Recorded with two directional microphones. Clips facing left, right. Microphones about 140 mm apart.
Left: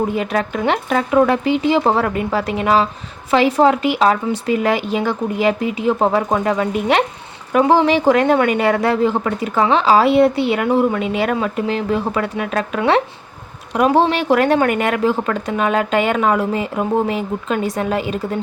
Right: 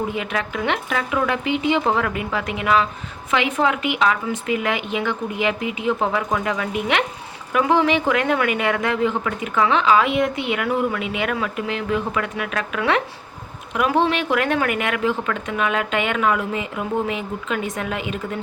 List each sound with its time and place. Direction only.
0.2 s a woman's voice: 40° left (ahead or behind)